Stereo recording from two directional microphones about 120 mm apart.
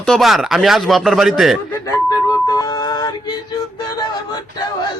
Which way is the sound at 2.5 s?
30° left (ahead or behind).